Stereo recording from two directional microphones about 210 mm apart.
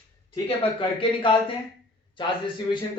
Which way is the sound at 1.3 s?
25° left (ahead or behind).